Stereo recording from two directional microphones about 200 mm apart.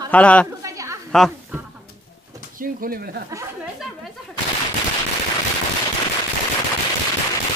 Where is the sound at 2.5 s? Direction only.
45° right (ahead or behind).